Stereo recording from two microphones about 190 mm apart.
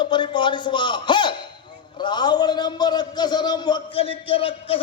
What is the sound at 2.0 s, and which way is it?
A man's voice, 25° left (ahead or behind).